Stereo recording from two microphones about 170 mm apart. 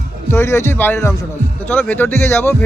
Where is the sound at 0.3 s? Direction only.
15° left (ahead or behind).